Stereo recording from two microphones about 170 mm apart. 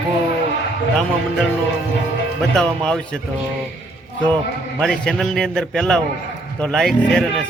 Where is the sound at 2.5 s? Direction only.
5° left (ahead or behind).